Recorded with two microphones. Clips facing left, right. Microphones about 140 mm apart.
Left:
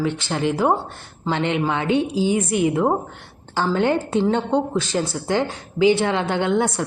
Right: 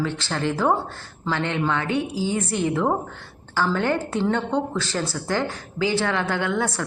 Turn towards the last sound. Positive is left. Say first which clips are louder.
# left 4 dB
turn(degrees=20)  # may be behind; listen again after turning